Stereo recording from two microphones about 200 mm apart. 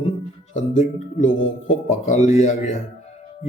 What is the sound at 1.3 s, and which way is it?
Speech, 70° left (ahead or behind).